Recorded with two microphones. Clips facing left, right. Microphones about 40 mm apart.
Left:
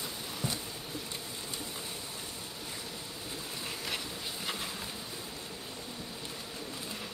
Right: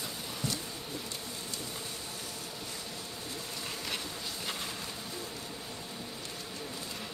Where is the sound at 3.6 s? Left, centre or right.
Centre.